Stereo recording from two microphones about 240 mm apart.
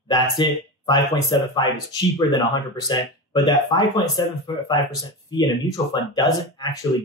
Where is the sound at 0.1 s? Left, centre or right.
Centre.